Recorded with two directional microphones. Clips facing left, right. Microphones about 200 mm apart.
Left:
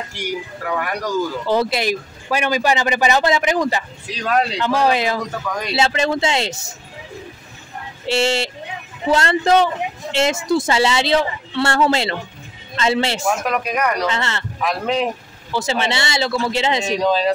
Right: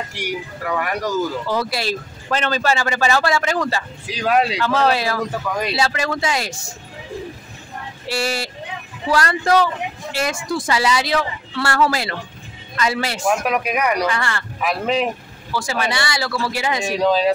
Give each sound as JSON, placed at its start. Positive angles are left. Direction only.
{"t": 0.1, "sound": "speech", "side_deg": 0}
{"t": 1.5, "sound": "a woman's voice", "side_deg": 25}
{"t": 4.2, "sound": "speech", "side_deg": -5}
{"t": 4.6, "sound": "a woman's voice", "side_deg": 15}
{"t": 8.1, "sound": "a woman's voice", "side_deg": 25}
{"t": 13.5, "sound": "speech", "side_deg": -10}
{"t": 14.0, "sound": "a woman's voice", "side_deg": 25}
{"t": 14.6, "sound": "speech", "side_deg": -5}
{"t": 15.5, "sound": "a woman's voice", "side_deg": 25}
{"t": 16.9, "sound": "speech", "side_deg": -10}